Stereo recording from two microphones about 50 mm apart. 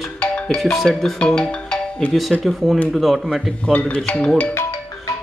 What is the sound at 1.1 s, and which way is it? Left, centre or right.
Music, centre.